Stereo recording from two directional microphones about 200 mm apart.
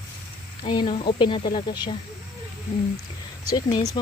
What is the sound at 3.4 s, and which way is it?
Speech, 20° left (ahead or behind).